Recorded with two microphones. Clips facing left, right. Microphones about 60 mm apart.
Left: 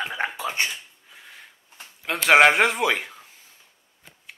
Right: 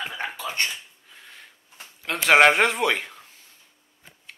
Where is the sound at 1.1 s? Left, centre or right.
Centre.